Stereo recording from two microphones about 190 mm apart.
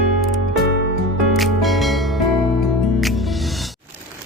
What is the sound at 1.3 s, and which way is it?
Music, centre (ahead or behind).